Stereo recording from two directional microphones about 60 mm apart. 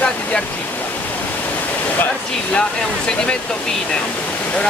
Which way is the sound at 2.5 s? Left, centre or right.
Centre.